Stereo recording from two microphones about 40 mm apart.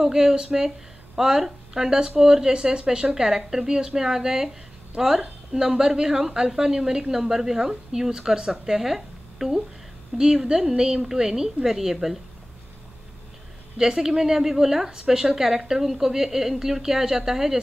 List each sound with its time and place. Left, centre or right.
0.0 s a woman's voice: centre
13.7 s a woman's voice: centre